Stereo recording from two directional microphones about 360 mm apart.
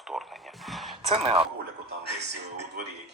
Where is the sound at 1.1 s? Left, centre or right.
Centre.